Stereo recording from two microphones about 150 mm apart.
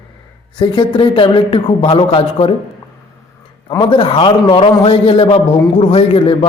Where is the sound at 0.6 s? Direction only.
30° left (ahead or behind).